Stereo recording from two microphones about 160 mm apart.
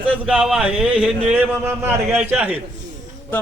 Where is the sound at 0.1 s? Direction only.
5° right (ahead or behind).